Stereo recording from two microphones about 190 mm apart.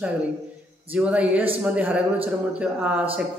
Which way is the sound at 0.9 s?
5° right (ahead or behind).